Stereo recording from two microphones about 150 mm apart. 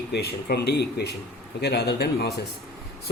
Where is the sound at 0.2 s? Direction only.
90° left.